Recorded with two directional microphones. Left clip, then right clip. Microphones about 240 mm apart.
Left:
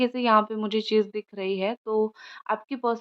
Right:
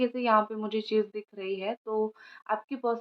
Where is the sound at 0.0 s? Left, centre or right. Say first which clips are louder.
Left 4 dB; left.